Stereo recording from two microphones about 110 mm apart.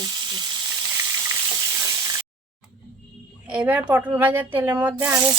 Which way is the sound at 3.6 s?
20° right (ahead or behind).